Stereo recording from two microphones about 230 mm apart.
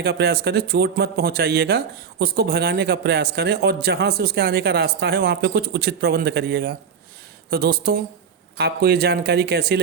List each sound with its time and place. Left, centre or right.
0.0 s speech: right